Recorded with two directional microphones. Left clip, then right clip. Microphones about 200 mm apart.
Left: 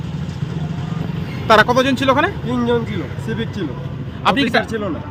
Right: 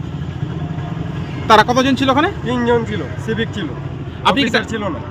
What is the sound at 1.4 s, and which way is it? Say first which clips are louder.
A man's voice: right 1 dB; centre (ahead or behind).